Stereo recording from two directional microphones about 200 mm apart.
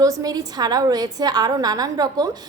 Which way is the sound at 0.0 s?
15° right (ahead or behind).